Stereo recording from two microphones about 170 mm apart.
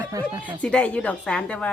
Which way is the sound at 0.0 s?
20° right (ahead or behind).